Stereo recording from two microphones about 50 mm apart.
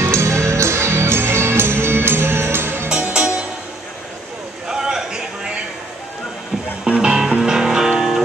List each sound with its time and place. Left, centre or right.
0.1 s music: right
3.1 s music: centre
4.6 s a sound: centre
6.9 s music: centre